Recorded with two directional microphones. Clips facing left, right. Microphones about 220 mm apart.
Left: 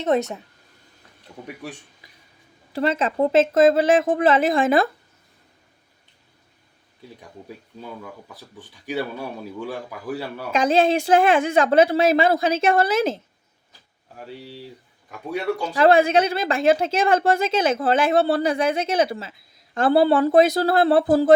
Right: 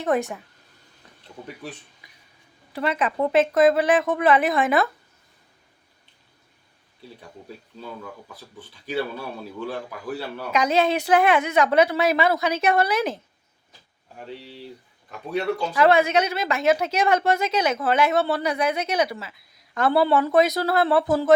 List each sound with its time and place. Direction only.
0.0 s a woman's voice: 20° left (ahead or behind)
2.7 s a woman's voice: 30° left (ahead or behind)
8.3 s speech: 15° left (ahead or behind)
10.5 s a woman's voice: 30° left (ahead or behind)
14.3 s speech: 10° left (ahead or behind)
15.7 s a woman's voice: 30° left (ahead or behind)